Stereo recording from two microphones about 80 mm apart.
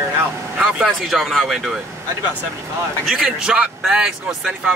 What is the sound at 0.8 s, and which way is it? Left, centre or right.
Speech, centre.